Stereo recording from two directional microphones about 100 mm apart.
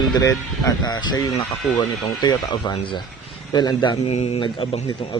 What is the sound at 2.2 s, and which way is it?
Speech, 45° left (ahead or behind).